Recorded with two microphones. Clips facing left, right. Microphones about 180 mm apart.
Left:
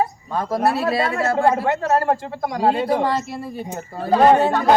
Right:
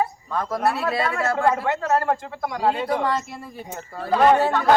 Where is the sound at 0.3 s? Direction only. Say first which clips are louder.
Left 3 dB; 30° left (ahead or behind).